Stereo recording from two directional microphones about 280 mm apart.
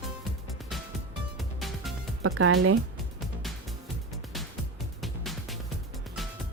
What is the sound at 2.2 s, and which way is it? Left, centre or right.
Speech, right.